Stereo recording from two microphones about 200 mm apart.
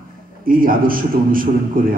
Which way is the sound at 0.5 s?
45° right (ahead or behind).